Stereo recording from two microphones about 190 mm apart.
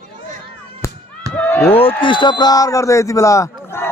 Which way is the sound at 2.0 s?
25° left (ahead or behind).